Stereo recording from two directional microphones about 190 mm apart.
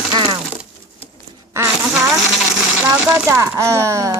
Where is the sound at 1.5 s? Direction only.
15° right (ahead or behind).